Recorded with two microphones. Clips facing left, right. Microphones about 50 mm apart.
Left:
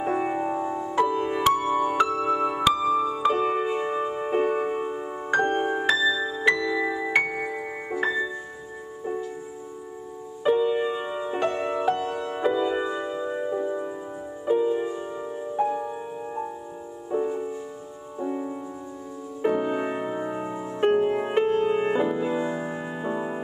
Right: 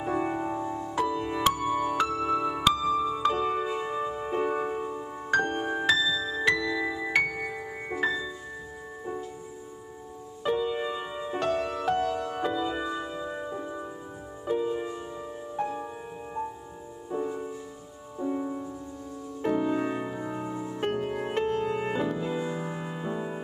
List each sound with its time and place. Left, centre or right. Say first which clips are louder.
0.0 s music: left 3 dB; left
1.4 s music: left 4 dB; centre
3.1 s music: left 3 dB; centre
3.3 s music: left 4 dB; left
5.3 s music: left 4 dB; left
10.4 s music: left 6 dB; centre
12.0 s music: even; left
12.4 s music: left 8 dB; left
17.1 s music: left 5 dB; centre
19.5 s music: right 2 dB; left
20.8 s music: left 9 dB; centre